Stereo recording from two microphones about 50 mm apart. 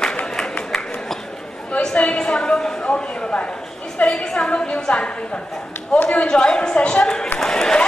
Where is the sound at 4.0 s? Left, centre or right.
Left.